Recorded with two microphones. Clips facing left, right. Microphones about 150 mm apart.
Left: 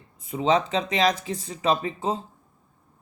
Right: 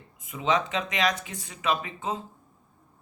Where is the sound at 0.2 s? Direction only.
30° left (ahead or behind).